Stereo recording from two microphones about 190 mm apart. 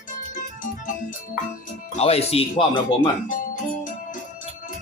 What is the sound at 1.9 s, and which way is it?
Speech, 30° left (ahead or behind).